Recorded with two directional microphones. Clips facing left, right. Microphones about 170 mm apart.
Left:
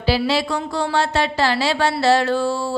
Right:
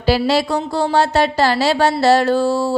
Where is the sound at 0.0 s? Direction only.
45° right (ahead or behind).